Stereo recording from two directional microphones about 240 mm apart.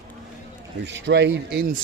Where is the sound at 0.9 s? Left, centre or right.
Right.